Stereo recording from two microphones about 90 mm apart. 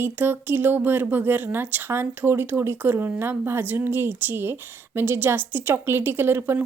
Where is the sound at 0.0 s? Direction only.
25° right (ahead or behind).